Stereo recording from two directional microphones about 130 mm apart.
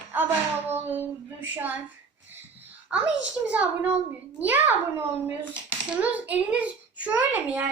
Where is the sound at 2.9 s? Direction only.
5° right (ahead or behind).